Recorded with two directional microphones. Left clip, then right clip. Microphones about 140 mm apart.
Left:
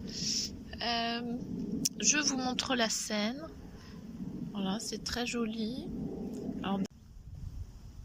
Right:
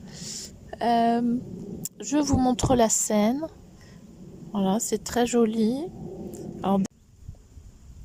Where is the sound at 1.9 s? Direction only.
50° right (ahead or behind).